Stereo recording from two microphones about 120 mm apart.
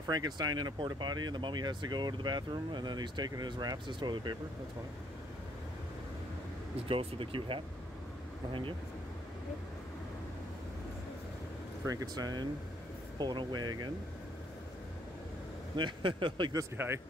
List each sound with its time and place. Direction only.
0.0 s speech: 35° right (ahead or behind)
6.9 s speech: 50° right (ahead or behind)
11.8 s speech: 30° right (ahead or behind)
15.7 s speech: 40° right (ahead or behind)
16.7 s speech: 20° right (ahead or behind)